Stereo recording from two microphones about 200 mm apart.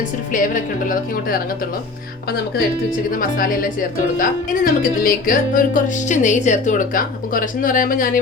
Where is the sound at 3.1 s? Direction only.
45° left (ahead or behind).